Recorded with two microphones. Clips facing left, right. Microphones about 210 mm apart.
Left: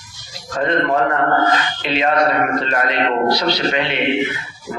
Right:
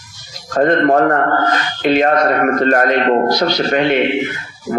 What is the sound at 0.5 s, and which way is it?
A man's voice, 50° right (ahead or behind).